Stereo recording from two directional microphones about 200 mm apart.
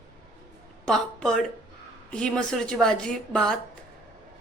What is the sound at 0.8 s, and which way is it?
A woman's voice, 5° left (ahead or behind).